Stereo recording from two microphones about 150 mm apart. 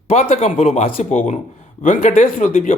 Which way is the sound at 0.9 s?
60° left (ahead or behind).